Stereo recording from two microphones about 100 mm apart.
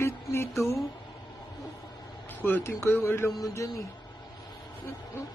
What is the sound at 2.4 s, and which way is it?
A man's voice, 25° left (ahead or behind).